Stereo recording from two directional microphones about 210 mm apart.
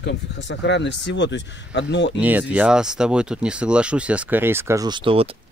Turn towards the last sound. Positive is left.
turn(degrees=-25)  # may be behind; listen again after turning